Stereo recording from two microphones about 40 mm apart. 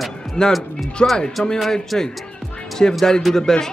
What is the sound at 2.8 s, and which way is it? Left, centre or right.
Speech, centre.